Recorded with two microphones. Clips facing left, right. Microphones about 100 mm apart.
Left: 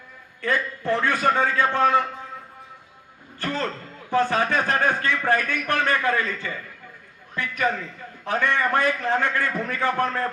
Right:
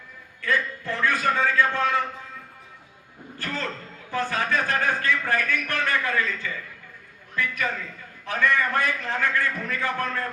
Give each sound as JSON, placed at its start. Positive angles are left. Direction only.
{"t": 0.4, "sound": "a man's voice", "side_deg": 30}
{"t": 3.3, "sound": "a man's voice", "side_deg": 25}
{"t": 7.6, "sound": "a man's voice", "side_deg": 25}